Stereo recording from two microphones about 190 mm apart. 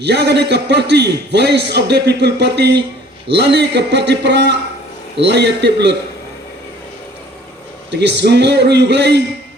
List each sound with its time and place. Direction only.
0.0 s a man's voice: 60° right (ahead or behind)
7.9 s a man's voice: 65° right (ahead or behind)